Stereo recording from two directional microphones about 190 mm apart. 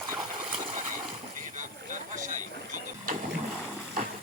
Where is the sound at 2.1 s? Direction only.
40° right (ahead or behind).